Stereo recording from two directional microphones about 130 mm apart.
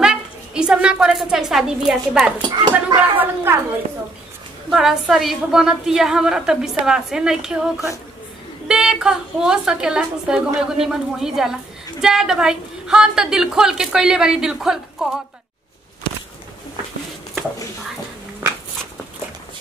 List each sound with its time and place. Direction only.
0.0 s a woman's voice: 5° right (ahead or behind)
2.5 s speech: 35° right (ahead or behind)
3.5 s a woman's voice: 15° right (ahead or behind)
4.6 s a woman's voice: 5° right (ahead or behind)